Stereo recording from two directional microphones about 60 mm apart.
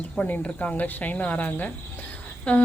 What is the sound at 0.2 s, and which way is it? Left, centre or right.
Speech, left.